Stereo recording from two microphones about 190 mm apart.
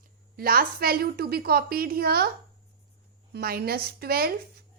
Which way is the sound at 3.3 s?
55° right (ahead or behind).